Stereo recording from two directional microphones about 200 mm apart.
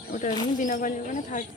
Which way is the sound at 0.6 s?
40° left (ahead or behind).